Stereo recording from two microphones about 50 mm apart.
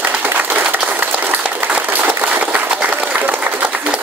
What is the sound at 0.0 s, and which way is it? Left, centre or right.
Clapping, right.